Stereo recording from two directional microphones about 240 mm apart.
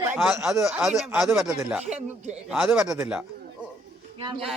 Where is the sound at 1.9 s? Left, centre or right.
Right.